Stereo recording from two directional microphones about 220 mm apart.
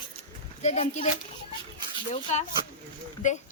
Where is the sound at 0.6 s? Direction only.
30° left (ahead or behind).